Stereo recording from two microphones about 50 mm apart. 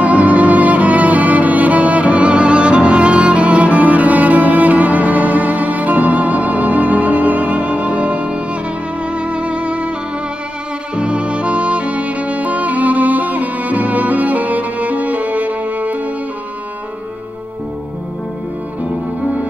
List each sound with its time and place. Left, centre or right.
0.0 s music: right
11.0 s music: right